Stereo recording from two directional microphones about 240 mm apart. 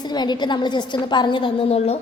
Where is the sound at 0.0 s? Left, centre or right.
Centre.